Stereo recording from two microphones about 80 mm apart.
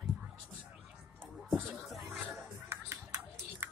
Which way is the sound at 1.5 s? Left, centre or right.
Centre.